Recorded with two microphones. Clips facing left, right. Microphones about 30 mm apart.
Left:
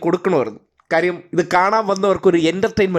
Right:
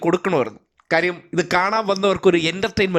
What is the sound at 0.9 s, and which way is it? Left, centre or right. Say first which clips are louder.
Speech: left 2 dB; right.